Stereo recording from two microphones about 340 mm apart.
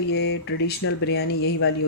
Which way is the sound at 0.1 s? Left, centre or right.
Left.